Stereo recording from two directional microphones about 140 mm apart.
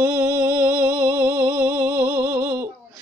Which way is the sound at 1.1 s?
15° right (ahead or behind).